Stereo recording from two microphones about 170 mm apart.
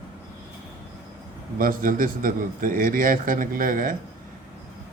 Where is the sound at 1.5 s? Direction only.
55° right (ahead or behind).